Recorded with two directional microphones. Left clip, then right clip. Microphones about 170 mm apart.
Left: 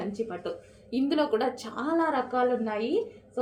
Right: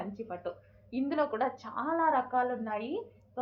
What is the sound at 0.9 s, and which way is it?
A woman's voice, 40° left (ahead or behind).